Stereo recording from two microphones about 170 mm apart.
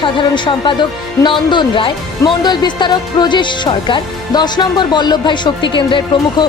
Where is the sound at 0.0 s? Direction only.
30° left (ahead or behind).